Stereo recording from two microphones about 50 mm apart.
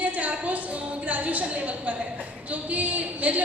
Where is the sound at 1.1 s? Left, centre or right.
Right.